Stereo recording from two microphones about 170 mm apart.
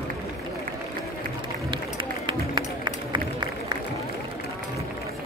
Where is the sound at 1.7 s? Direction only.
30° right (ahead or behind).